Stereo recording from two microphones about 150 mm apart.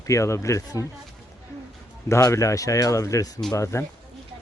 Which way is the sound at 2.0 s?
20° left (ahead or behind).